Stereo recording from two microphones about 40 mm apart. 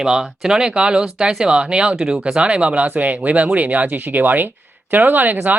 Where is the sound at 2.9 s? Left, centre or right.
Right.